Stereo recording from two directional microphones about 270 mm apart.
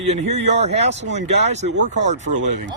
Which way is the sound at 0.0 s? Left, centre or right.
Right.